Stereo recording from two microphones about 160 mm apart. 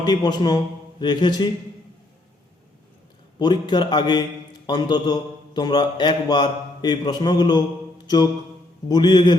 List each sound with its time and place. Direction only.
0.0 s a man's voice: 25° left (ahead or behind)
3.3 s a man's voice: 25° left (ahead or behind)
8.0 s mantra: 25° left (ahead or behind)
8.9 s a man's voice: 25° left (ahead or behind)